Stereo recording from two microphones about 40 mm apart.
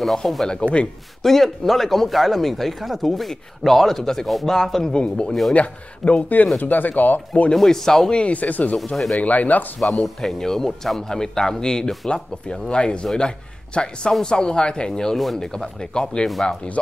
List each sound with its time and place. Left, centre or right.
0.0 s speech: centre
0.5 s speech: left
1.2 s speech: centre
4.9 s a man's voice: left
7.5 s speech: centre
8.1 s speech: left
8.4 s a man's voice: left
9.8 s speech: centre